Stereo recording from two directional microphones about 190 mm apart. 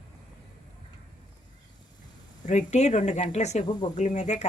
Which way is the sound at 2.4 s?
40° left (ahead or behind).